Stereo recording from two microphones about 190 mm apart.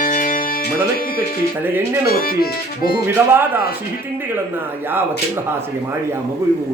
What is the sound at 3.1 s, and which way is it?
A man's voice, 10° right (ahead or behind).